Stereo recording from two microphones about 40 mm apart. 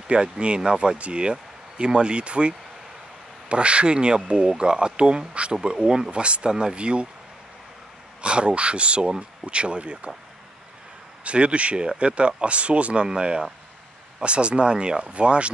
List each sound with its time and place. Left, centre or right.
0.1 s speech: right
8.2 s speech: right
11.2 s speech: right
13.0 s speech: right